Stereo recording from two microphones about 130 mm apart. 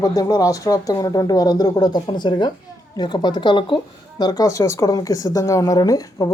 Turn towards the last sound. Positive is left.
turn(degrees=30)  # may be behind; listen again after turning